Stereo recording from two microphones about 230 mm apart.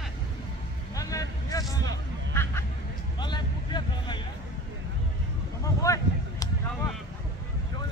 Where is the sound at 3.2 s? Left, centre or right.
Centre.